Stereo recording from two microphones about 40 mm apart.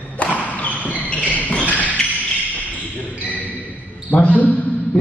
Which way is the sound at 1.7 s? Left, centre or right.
Left.